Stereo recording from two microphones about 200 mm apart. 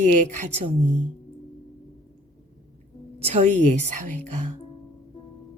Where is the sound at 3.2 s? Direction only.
35° right (ahead or behind).